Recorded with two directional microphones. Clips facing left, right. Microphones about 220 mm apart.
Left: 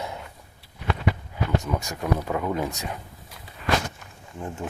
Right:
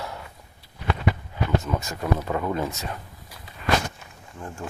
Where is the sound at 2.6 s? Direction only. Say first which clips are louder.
Even; 15° left (ahead or behind).